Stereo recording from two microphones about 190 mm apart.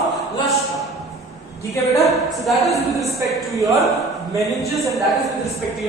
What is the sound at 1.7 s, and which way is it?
Speech, 15° left (ahead or behind).